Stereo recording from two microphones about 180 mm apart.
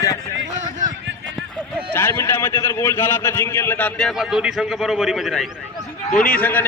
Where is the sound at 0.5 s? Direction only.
45° right (ahead or behind).